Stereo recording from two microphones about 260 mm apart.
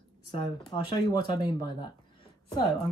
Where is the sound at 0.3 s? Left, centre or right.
Centre.